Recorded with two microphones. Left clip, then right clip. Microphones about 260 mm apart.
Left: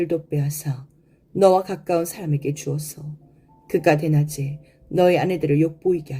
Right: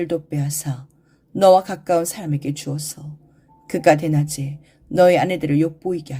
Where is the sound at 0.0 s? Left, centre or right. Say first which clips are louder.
Even; right.